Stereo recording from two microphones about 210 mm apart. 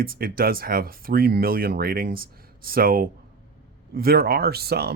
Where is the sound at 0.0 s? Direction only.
45° right (ahead or behind).